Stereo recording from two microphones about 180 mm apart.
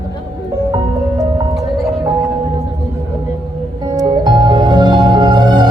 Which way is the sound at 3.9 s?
25° right (ahead or behind).